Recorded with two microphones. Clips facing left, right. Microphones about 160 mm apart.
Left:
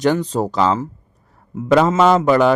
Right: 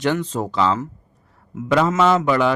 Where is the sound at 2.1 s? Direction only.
40° left (ahead or behind).